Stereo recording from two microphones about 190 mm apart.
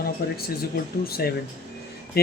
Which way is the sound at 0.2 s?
55° left (ahead or behind).